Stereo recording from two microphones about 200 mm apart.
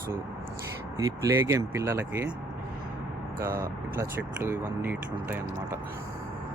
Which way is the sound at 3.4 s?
15° right (ahead or behind).